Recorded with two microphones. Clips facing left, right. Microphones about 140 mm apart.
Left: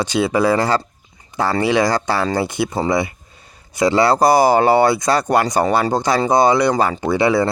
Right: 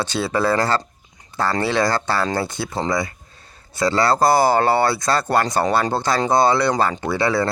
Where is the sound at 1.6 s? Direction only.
15° left (ahead or behind).